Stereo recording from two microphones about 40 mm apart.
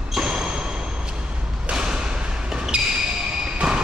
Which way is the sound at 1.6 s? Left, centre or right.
Right.